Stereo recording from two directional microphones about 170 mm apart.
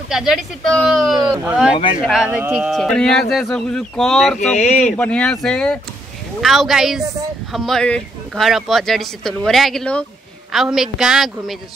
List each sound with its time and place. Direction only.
0.1 s speech: centre (ahead or behind)
4.6 s speech: 45° left (ahead or behind)
4.9 s speech: 5° left (ahead or behind)